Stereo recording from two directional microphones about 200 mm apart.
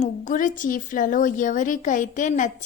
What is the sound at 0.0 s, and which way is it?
Speech, 40° left (ahead or behind).